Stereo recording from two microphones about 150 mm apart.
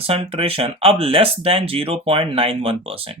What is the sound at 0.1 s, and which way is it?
Speech, 40° right (ahead or behind).